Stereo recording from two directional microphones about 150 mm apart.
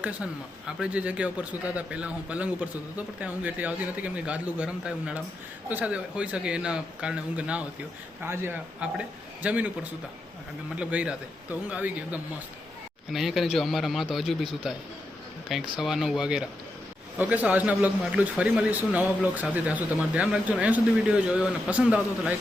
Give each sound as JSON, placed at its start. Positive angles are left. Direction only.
{"t": 0.8, "sound": "a man's voice", "side_deg": -10}
{"t": 10.8, "sound": "a man's voice", "side_deg": -10}
{"t": 15.8, "sound": "a man's voice", "side_deg": 0}